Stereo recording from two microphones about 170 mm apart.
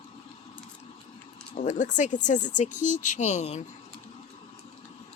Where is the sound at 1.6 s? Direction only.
45° left (ahead or behind).